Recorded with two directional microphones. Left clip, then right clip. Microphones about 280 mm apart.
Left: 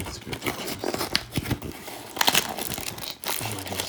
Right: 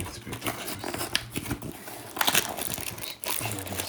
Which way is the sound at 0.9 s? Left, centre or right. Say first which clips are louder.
Left 3 dB; centre.